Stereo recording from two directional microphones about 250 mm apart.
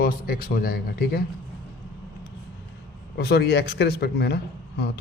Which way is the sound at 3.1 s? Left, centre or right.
Left.